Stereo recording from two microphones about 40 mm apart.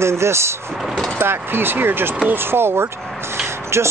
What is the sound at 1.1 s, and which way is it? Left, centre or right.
Speech, right.